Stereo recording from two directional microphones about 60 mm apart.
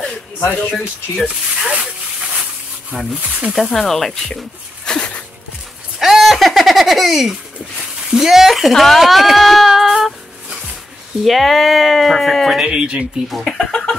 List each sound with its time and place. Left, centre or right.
0.4 s speech: left
0.7 s speech: centre
3.2 s speech: right
3.5 s speech: centre
4.8 s dog: centre
5.9 s a sound: centre
8.1 s speech: centre
11.2 s speech: centre
12.5 s speech: centre
13.3 s speech: centre
13.6 s chicken: centre